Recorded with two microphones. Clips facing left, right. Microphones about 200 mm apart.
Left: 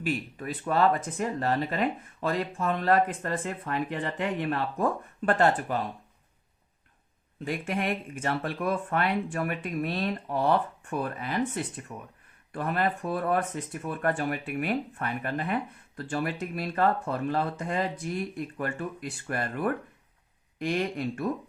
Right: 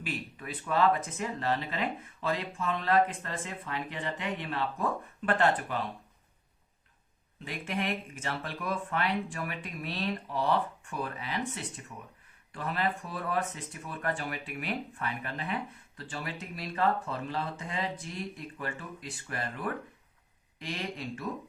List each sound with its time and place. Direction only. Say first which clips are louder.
0.0 s speech: left 7 dB; 45° left (ahead or behind)
7.3 s speech: left 5 dB; 45° left (ahead or behind)